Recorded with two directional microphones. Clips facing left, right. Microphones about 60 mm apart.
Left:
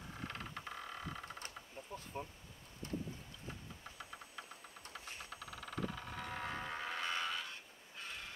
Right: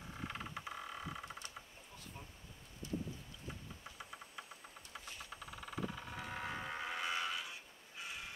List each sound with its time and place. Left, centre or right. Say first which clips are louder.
0.2 s vehicle: right 1 dB; centre
1.8 s bee: left 8 dB; left
2.1 s speech: left 11 dB; left
4.0 s a sound: even; centre
5.3 s vehicle: even; centre